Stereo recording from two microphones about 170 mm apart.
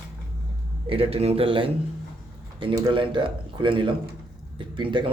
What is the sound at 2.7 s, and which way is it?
Speech, 25° right (ahead or behind).